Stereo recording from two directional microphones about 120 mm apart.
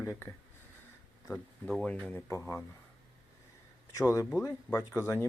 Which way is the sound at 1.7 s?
5° left (ahead or behind).